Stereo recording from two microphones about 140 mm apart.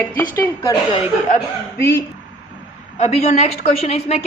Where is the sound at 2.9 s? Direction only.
50° left (ahead or behind).